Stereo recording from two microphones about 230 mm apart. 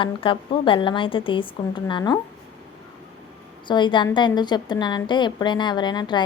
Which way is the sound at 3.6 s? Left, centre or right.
Centre.